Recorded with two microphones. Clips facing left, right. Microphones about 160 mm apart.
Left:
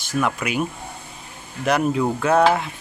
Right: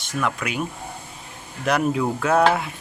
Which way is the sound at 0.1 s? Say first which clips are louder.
Left 3 dB; 5° left (ahead or behind).